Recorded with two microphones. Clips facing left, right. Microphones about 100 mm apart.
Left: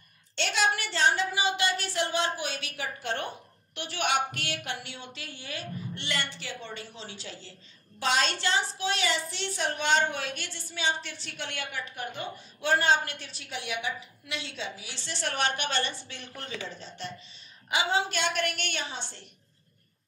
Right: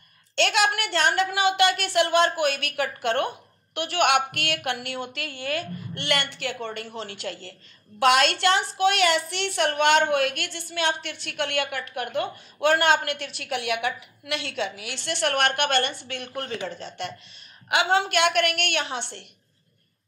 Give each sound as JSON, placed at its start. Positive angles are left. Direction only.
{"t": 0.4, "sound": "a woman's voice", "side_deg": -65}